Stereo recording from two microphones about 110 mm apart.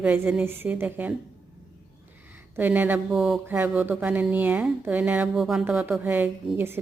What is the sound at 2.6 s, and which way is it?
Speech, 15° right (ahead or behind).